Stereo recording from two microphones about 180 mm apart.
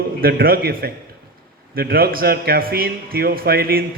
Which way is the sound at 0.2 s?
55° right (ahead or behind).